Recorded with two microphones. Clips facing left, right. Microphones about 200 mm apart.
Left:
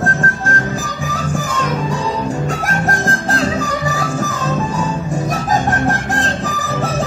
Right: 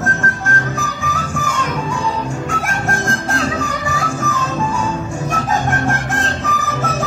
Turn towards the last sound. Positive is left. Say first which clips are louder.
# left 2 dB
turn(degrees=35)  # may be behind; listen again after turning